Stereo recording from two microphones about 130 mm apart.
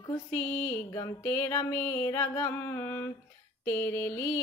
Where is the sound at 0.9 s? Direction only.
20° left (ahead or behind).